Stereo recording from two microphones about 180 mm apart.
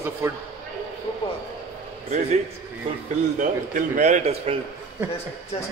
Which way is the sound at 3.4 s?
45° right (ahead or behind).